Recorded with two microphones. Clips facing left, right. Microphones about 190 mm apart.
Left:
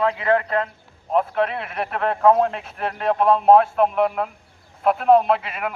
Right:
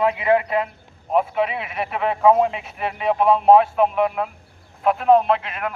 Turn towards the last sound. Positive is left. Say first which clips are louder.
# even
turn(degrees=5)  # may be behind; listen again after turning